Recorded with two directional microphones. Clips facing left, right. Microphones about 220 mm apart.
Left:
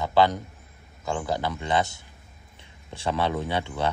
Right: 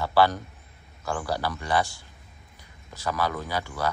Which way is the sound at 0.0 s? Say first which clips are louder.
Left 1 dB; 20° left (ahead or behind).